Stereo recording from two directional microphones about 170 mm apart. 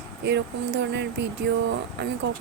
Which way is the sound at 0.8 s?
90° right.